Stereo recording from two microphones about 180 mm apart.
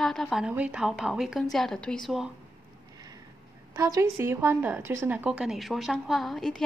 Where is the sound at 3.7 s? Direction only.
20° right (ahead or behind); by 6.6 s centre (ahead or behind).